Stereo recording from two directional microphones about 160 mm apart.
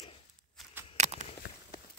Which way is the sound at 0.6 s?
Centre (ahead or behind).